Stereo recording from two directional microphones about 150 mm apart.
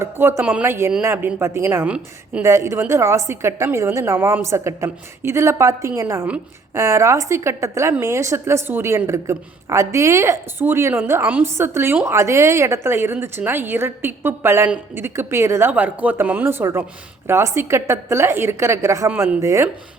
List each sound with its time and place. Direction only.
0.0 s a woman's voice: 15° right (ahead or behind)